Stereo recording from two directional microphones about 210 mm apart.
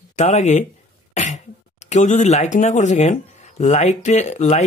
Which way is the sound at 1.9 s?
35° left (ahead or behind).